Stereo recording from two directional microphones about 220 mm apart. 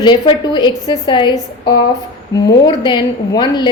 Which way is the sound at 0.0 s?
20° left (ahead or behind).